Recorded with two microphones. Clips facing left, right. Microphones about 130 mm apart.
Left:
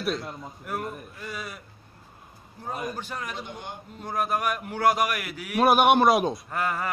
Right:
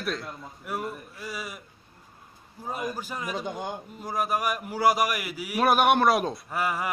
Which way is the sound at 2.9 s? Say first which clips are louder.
Right 2 dB; 10° right (ahead or behind).